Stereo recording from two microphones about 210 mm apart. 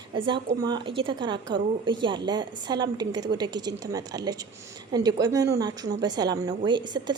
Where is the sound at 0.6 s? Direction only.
20° right (ahead or behind).